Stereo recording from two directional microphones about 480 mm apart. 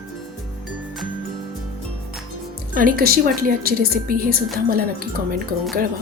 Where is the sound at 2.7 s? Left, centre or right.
Centre.